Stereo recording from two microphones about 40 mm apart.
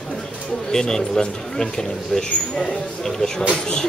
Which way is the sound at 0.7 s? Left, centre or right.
Centre.